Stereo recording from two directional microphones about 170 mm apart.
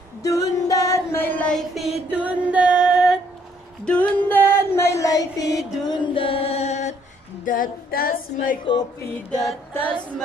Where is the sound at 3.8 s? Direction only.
5° left (ahead or behind); by 6.9 s 40° left (ahead or behind).